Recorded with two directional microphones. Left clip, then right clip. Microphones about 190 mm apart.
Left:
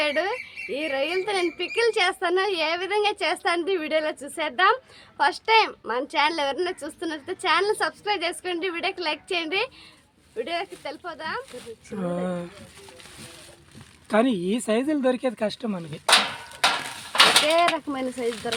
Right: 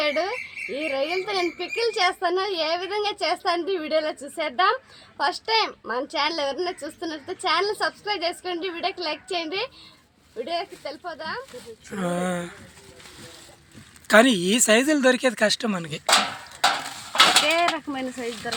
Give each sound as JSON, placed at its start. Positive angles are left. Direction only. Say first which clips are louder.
{"t": 0.0, "sound": "a woman's voice", "louder": "even", "side_deg": 25}
{"t": 11.9, "sound": "speech", "louder": "right 2 dB", "side_deg": 5}
{"t": 14.1, "sound": "speech", "louder": "right 6 dB", "side_deg": 0}
{"t": 17.1, "sound": "a sound", "louder": "even", "side_deg": 25}
{"t": 17.7, "sound": "a woman's voice", "louder": "left 1 dB", "side_deg": 25}